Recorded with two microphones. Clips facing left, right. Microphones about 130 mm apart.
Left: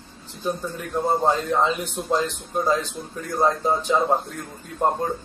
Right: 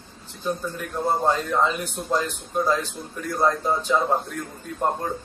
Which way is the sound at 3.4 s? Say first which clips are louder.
Left 1 dB; 15° left (ahead or behind).